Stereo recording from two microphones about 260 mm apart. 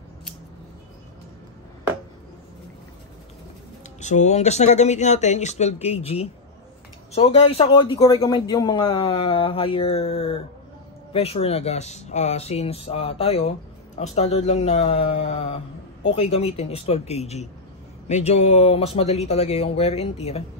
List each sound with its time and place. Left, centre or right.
4.0 s speech: left